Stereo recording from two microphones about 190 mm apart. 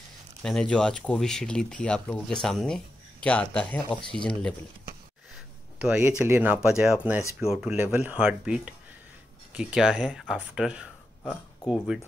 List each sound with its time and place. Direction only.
0.4 s speech: 5° left (ahead or behind)
5.3 s speech: 5° right (ahead or behind)